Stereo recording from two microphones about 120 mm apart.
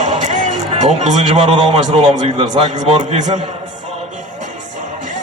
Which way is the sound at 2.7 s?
75° right (ahead or behind).